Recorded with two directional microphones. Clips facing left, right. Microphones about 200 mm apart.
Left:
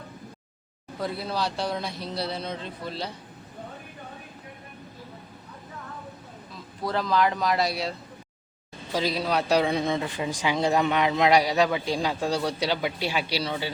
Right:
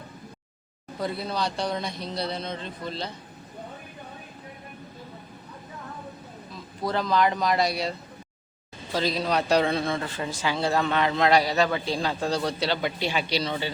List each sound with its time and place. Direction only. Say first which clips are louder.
0.9 s speech: even; centre (ahead or behind)
6.8 s a man's voice: right 1 dB; centre (ahead or behind)